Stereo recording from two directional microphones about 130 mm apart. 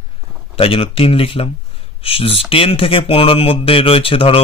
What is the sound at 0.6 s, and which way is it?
Speech, 45° left (ahead or behind).